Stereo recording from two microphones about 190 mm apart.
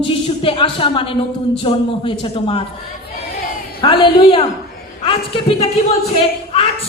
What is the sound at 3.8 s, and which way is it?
Speech, 25° left (ahead or behind).